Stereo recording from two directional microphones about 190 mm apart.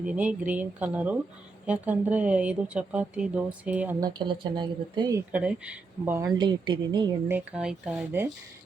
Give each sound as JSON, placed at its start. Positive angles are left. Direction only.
{"t": 0.0, "sound": "speech", "side_deg": -5}
{"t": 4.0, "sound": "a woman's voice", "side_deg": -25}
{"t": 5.3, "sound": "speech", "side_deg": -5}
{"t": 7.3, "sound": "speech", "side_deg": -5}